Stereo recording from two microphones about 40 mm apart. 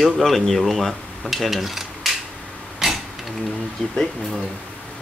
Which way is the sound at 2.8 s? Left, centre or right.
Centre.